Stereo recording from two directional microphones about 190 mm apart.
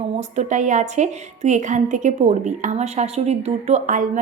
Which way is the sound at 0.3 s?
40° right (ahead or behind).